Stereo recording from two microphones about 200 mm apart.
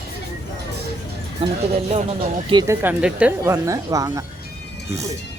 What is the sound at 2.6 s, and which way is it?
Speech, 10° right (ahead or behind).